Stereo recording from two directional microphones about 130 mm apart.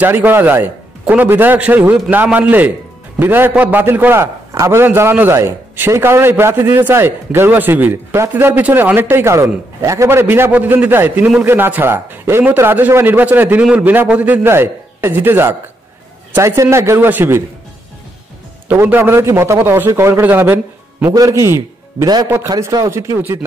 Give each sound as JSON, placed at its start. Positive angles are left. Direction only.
{"t": 0.0, "sound": "a man's voice", "side_deg": -15}
{"t": 18.7, "sound": "a man's voice", "side_deg": -15}